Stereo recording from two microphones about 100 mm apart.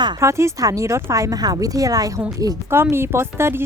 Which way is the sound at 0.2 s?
30° right (ahead or behind).